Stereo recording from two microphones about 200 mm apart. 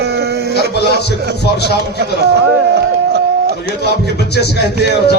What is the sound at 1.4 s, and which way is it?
Speech, 55° left (ahead or behind).